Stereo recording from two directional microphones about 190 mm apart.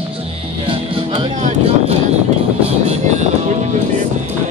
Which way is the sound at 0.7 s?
25° right (ahead or behind).